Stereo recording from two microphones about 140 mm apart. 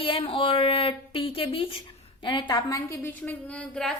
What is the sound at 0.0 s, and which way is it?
A woman's voice, 40° left (ahead or behind).